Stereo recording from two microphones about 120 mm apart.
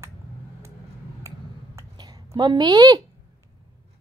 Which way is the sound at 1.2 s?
25° right (ahead or behind).